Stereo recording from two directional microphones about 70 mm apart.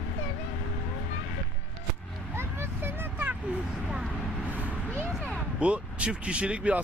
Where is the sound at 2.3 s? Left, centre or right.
Right.